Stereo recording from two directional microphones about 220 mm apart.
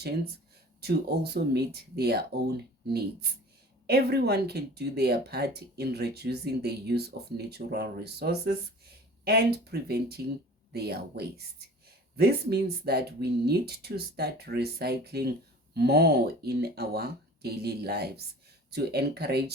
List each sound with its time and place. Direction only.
0.8 s speech: 45° right (ahead or behind)
3.8 s speech: 45° right (ahead or behind)